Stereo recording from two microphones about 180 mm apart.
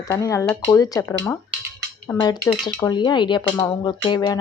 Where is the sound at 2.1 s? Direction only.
25° left (ahead or behind).